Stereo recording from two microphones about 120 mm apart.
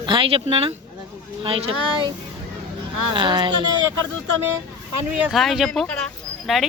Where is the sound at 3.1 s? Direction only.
40° right (ahead or behind).